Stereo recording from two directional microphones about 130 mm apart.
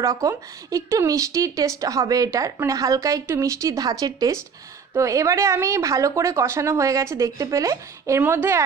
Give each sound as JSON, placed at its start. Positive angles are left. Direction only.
{"t": 0.0, "sound": "a woman's voice", "side_deg": -25}